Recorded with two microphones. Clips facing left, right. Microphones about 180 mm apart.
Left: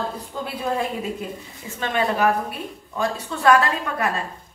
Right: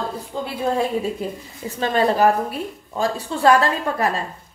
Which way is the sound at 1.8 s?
35° right (ahead or behind).